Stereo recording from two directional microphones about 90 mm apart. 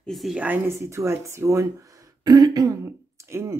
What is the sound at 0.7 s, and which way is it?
Speech, 30° right (ahead or behind).